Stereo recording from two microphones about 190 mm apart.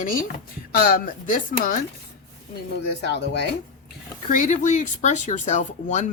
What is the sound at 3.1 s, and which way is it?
Speech, 65° left (ahead or behind).